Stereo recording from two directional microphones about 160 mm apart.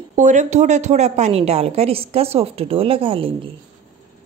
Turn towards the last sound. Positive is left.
turn(degrees=-35)  # may be behind; listen again after turning